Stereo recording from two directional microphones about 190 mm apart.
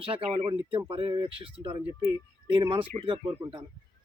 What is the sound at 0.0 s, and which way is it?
Speech, 25° right (ahead or behind).